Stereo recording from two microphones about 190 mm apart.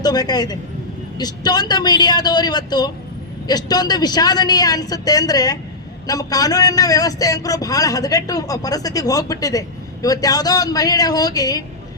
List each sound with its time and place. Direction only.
0.0 s a man's voice: 20° left (ahead or behind)